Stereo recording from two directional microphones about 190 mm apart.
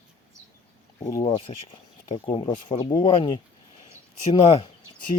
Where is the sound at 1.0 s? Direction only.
20° left (ahead or behind).